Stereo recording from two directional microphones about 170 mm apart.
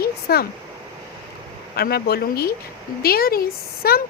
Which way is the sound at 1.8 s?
65° left (ahead or behind).